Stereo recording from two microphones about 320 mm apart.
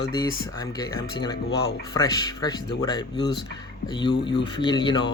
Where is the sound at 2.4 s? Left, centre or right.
Centre.